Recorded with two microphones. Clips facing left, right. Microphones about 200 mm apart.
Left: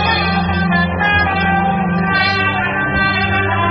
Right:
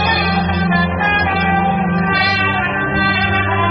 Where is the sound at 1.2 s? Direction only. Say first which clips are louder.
Even; 10° right (ahead or behind).